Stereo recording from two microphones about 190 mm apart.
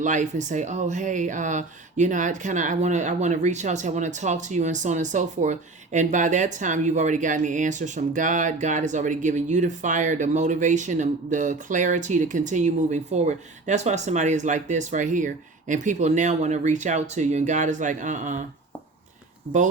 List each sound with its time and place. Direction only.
0.0 s speech: 40° right (ahead or behind)